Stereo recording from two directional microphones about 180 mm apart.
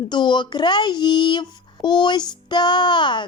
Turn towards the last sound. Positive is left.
turn(degrees=25)  # may be behind; listen again after turning